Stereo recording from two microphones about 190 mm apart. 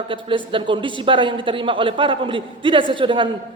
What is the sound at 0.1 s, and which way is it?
A man's voice, 25° right (ahead or behind).